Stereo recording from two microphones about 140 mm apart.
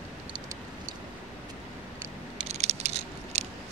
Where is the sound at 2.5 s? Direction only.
50° right (ahead or behind).